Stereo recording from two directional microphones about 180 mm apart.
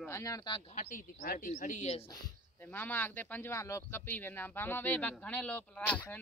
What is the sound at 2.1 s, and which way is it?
Speech, 10° left (ahead or behind).